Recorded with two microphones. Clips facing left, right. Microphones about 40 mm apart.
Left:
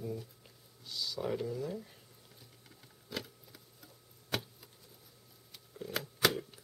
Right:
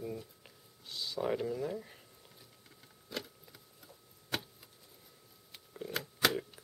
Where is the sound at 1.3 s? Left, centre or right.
Centre.